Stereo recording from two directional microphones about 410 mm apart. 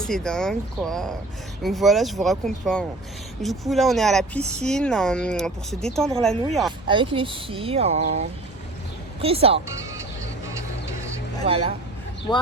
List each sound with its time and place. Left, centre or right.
0.0 s speech: centre
6.8 s speech: centre
9.2 s speech: centre
11.4 s speech: centre